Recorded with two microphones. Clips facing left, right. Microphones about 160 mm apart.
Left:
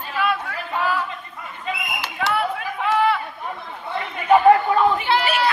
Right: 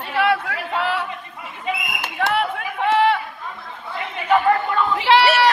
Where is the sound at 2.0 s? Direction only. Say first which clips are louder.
Right 2 dB; 50° right (ahead or behind).